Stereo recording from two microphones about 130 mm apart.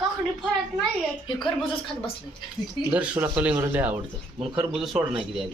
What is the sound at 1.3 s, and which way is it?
Speech, 35° left (ahead or behind).